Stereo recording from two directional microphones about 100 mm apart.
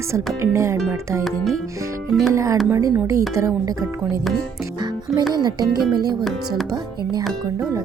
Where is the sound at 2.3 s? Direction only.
30° right (ahead or behind).